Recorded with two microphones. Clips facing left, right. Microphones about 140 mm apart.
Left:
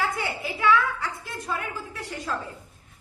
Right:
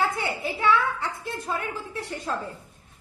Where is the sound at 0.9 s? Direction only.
25° right (ahead or behind).